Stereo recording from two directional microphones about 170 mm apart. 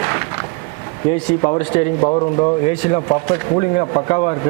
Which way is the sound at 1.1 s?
45° left (ahead or behind).